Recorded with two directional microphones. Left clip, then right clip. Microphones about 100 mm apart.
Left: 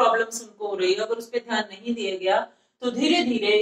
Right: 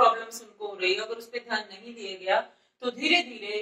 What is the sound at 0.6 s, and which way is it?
Speech, 45° left (ahead or behind).